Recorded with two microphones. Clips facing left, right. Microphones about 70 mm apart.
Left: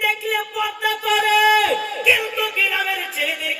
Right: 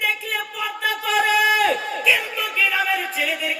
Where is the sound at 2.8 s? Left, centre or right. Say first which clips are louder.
Right 1 dB; right.